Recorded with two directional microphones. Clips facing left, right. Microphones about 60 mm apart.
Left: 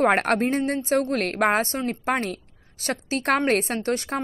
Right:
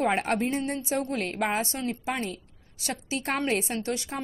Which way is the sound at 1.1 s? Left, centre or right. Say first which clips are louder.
Left 6 dB; left.